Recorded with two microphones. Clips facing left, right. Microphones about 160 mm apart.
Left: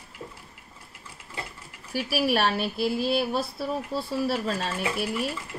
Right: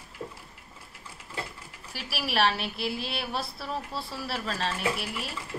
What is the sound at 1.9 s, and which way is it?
Speech, 50° left (ahead or behind).